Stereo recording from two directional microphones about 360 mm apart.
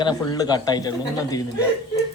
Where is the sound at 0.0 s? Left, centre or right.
Centre.